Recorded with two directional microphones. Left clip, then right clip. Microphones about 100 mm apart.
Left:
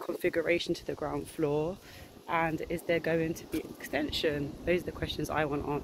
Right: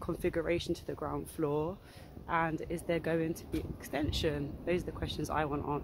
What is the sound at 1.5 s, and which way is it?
Speech, 45° right (ahead or behind).